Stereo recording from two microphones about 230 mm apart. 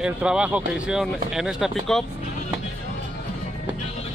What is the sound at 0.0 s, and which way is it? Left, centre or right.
Speech, centre.